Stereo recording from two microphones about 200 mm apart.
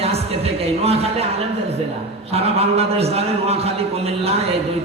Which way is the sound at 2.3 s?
30° right (ahead or behind).